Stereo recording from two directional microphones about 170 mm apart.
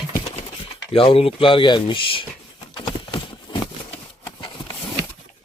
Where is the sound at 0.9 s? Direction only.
35° left (ahead or behind).